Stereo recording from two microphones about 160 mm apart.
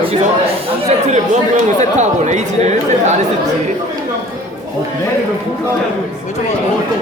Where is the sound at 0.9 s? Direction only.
45° right (ahead or behind).